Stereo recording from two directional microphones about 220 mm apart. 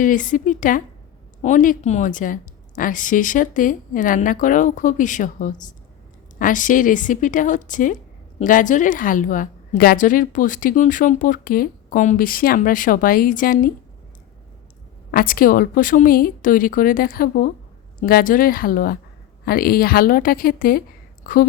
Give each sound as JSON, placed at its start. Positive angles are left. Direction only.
{"t": 0.0, "sound": "a woman's voice", "side_deg": 35}
{"t": 15.1, "sound": "a woman's voice", "side_deg": 40}